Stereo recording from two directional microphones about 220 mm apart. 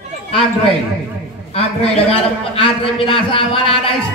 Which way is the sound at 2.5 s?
25° left (ahead or behind).